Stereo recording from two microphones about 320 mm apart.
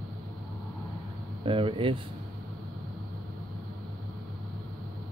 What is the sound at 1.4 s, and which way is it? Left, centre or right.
Speech, centre.